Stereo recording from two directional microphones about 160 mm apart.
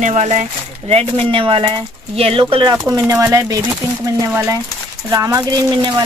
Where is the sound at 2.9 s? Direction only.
20° right (ahead or behind).